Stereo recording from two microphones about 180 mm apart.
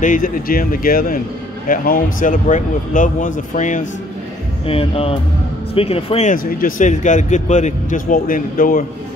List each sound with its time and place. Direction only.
0.0 s speech: 50° left (ahead or behind)
4.6 s speech: 30° left (ahead or behind)
6.3 s speech: 50° left (ahead or behind)